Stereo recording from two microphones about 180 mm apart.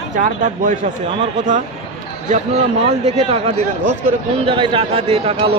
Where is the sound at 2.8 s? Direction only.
40° right (ahead or behind).